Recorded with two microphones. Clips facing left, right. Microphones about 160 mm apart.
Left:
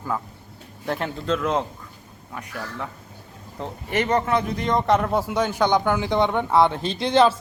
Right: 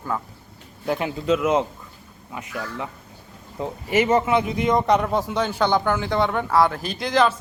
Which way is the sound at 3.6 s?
5° right (ahead or behind).